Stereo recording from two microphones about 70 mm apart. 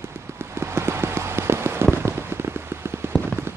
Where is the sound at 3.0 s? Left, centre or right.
Right.